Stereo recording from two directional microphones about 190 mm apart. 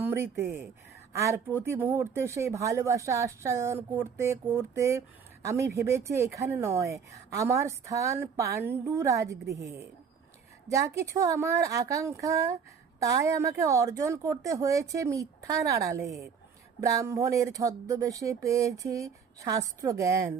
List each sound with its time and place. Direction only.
0.0 s speech: 15° right (ahead or behind)